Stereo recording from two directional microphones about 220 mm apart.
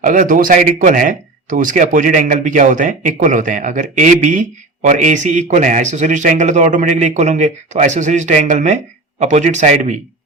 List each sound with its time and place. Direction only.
0.0 s speech: 35° right (ahead or behind)